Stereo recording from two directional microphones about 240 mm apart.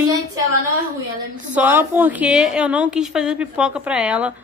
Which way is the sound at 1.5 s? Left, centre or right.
Centre.